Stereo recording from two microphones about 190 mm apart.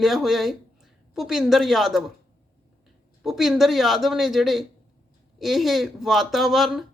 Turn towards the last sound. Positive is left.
turn(degrees=0)  # may be behind; listen again after turning